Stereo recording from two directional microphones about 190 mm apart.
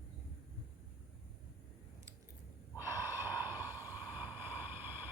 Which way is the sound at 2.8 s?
10° right (ahead or behind).